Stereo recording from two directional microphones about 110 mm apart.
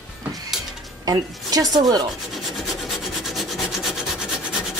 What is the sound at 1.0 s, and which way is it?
Speech, 35° right (ahead or behind).